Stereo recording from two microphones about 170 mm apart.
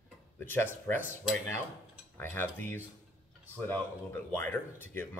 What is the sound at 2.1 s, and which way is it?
Speech, 10° left (ahead or behind).